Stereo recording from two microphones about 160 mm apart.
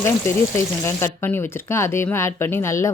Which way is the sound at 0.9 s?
15° left (ahead or behind).